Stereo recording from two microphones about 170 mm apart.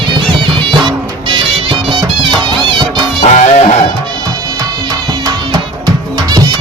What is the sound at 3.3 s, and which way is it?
Music, 40° left (ahead or behind).